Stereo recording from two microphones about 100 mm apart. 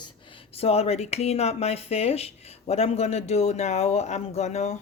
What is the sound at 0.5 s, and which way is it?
Speech, 90° left.